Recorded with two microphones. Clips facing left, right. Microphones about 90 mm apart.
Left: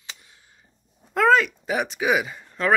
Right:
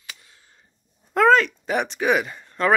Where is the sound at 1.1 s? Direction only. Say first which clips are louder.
Right 2 dB; centre (ahead or behind).